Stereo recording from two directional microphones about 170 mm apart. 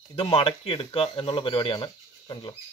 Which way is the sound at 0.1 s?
35° left (ahead or behind).